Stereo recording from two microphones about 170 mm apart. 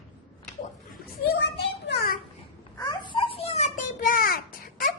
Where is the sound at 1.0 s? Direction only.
65° left (ahead or behind).